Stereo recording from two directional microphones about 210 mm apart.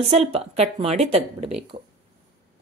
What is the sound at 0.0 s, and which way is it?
Speech, 30° right (ahead or behind).